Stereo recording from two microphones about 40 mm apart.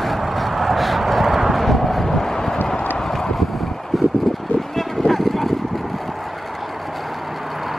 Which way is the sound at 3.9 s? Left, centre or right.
Centre.